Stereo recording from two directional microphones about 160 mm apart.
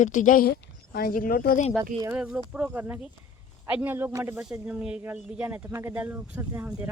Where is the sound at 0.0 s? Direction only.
55° left (ahead or behind).